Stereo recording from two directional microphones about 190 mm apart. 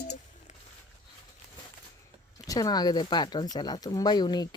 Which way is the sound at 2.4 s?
20° left (ahead or behind).